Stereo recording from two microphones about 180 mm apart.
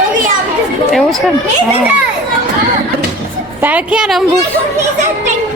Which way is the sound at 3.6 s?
10° right (ahead or behind).